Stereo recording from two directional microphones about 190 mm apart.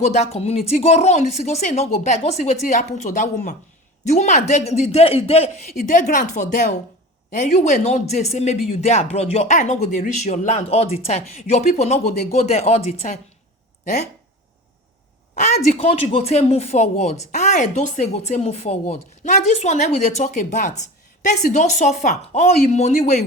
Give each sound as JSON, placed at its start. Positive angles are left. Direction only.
{"t": 0.0, "sound": "speech", "side_deg": 35}
{"t": 15.4, "sound": "speech", "side_deg": 35}